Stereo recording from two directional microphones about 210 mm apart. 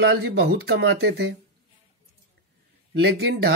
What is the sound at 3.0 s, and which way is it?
Speech, 55° right (ahead or behind).